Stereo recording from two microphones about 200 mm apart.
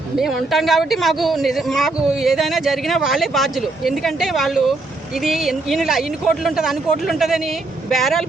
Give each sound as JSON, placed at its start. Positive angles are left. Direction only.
{"t": 0.2, "sound": "speech", "side_deg": 0}